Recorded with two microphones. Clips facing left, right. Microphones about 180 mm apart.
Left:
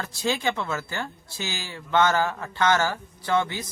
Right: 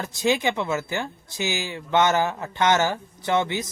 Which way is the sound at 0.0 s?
20° right (ahead or behind).